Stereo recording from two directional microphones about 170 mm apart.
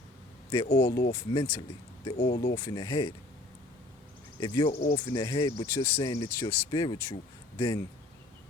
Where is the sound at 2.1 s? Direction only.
65° left (ahead or behind).